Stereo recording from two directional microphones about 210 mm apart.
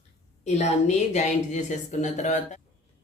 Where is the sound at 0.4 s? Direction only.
35° left (ahead or behind).